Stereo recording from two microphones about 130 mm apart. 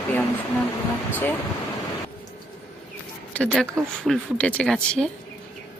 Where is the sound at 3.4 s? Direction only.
5° left (ahead or behind).